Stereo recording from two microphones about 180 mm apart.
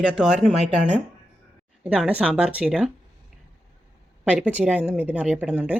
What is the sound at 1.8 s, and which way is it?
Speech, 5° right (ahead or behind).